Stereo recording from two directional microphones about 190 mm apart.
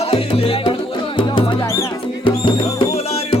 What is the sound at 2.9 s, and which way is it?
Music, 30° left (ahead or behind).